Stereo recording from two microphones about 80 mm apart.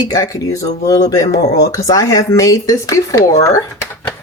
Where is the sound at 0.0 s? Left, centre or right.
Left.